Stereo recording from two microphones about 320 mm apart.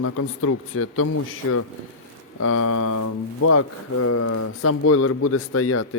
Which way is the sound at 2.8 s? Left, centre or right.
Left.